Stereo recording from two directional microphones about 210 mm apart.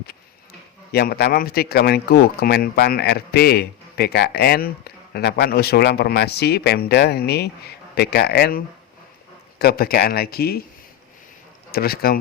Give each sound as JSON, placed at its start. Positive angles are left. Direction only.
{"t": 0.9, "sound": "speech", "side_deg": 50}
{"t": 11.7, "sound": "speech", "side_deg": 45}